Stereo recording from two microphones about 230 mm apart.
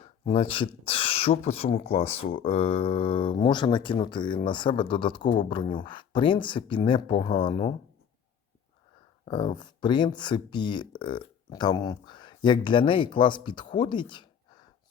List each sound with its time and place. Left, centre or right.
0.0 s speech: left
9.2 s speech: left